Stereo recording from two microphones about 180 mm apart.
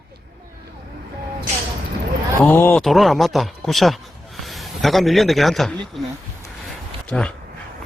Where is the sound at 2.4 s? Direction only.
10° left (ahead or behind).